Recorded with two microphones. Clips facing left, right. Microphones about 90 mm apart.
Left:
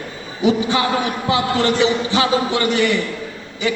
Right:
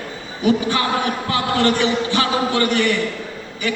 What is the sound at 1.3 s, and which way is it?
Speech, 20° left (ahead or behind).